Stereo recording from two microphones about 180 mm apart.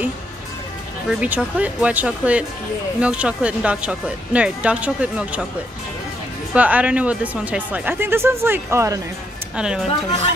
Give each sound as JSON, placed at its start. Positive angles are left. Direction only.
{"t": 1.0, "sound": "speech", "side_deg": -10}
{"t": 6.5, "sound": "speech", "side_deg": -10}
{"t": 9.6, "sound": "a woman's voice", "side_deg": -5}